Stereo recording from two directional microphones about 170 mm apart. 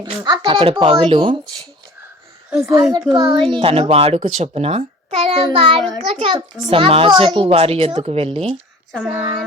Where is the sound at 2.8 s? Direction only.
20° right (ahead or behind); by 8.2 s 40° right (ahead or behind).